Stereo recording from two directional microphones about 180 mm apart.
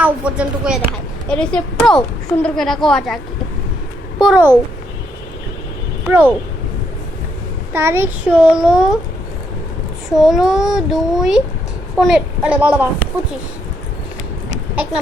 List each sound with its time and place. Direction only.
0.0 s a child's voice: 5° right (ahead or behind)
4.2 s a child's voice: 5° right (ahead or behind)
6.1 s a woman's voice: 10° right (ahead or behind)
7.7 s a child's voice: 15° right (ahead or behind)
10.2 s a child's voice: centre (ahead or behind)